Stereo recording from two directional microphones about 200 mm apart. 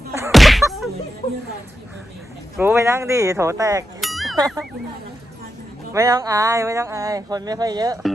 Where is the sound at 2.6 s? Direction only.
10° right (ahead or behind).